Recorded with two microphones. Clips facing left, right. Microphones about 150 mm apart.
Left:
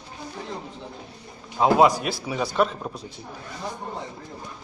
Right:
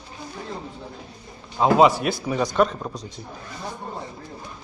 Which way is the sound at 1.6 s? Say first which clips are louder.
Right 1 dB; 5° left (ahead or behind).